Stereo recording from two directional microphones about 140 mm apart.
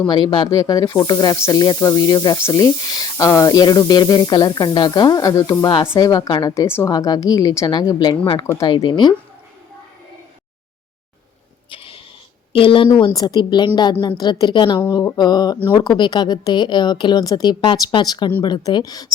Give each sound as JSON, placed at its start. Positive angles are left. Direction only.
{"t": 0.1, "sound": "a woman's voice", "side_deg": 30}
{"t": 8.4, "sound": "speech", "side_deg": 20}
{"t": 8.7, "sound": "a woman's voice", "side_deg": 35}
{"t": 11.7, "sound": "a sound", "side_deg": 40}
{"t": 12.5, "sound": "a woman's voice", "side_deg": 40}
{"t": 13.1, "sound": "a woman's voice", "side_deg": 30}